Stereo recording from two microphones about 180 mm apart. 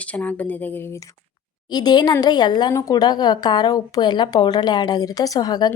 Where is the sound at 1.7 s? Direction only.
25° left (ahead or behind).